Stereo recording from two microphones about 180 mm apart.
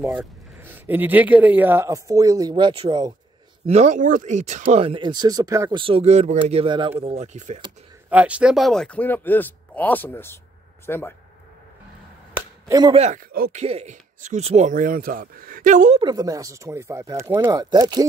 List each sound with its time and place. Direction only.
0.6 s speech: 10° right (ahead or behind)
3.6 s speech: 40° right (ahead or behind)
4.6 s speech: 30° right (ahead or behind)
8.1 s speech: 5° right (ahead or behind); by 11.1 s 10° left (ahead or behind)
12.4 s chop: 15° right (ahead or behind)
12.9 s speech: 35° right (ahead or behind)
13.3 s speech: 55° right (ahead or behind)
13.6 s speech: 35° right (ahead or behind)
16.0 s speech: 20° right (ahead or behind)